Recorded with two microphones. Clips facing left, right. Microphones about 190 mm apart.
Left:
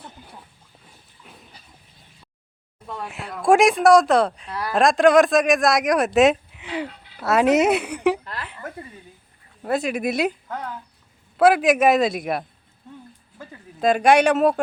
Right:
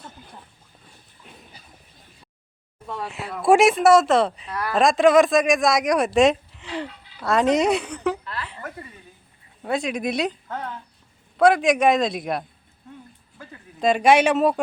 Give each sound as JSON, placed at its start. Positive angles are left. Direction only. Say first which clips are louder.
{"t": 1.2, "sound": "dog", "louder": "even", "side_deg": 5}
{"t": 2.8, "sound": "speech", "louder": "right 1 dB", "side_deg": 0}
{"t": 8.2, "sound": "a sound", "louder": "right 1 dB", "side_deg": 45}
{"t": 9.6, "sound": "speech", "louder": "left 2 dB", "side_deg": 0}
{"t": 13.7, "sound": "speech", "louder": "left 1 dB", "side_deg": 0}